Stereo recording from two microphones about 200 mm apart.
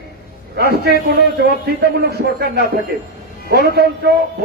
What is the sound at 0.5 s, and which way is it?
A man's voice, 55° right (ahead or behind).